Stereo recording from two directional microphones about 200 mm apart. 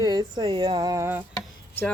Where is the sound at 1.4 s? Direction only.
10° left (ahead or behind).